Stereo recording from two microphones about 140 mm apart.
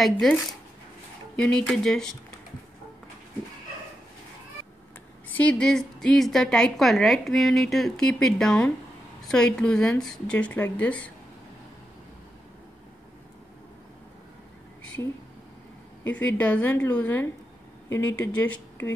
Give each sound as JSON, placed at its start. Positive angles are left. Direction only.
{"t": 0.0, "sound": "a woman's voice", "side_deg": 0}
{"t": 5.3, "sound": "a woman's voice", "side_deg": 10}
{"t": 16.2, "sound": "speech", "side_deg": 10}